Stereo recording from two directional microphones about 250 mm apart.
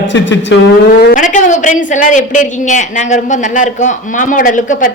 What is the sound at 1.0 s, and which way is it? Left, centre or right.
A woman's voice, left.